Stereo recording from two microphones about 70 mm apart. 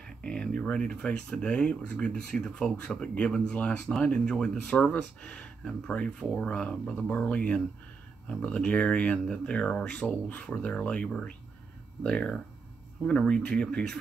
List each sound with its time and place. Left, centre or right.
0.0 s speech: centre